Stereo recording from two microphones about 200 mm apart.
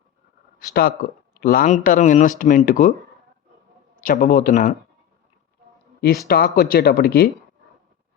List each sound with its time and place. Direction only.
0.7 s speech: 45° left (ahead or behind)
4.0 s speech: 45° left (ahead or behind)
6.2 s speech: 50° left (ahead or behind)